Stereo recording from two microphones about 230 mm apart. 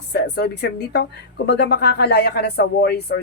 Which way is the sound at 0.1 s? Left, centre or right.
Left.